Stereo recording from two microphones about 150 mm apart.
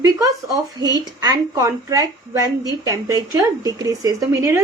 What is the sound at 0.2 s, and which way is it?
Speech, 25° right (ahead or behind).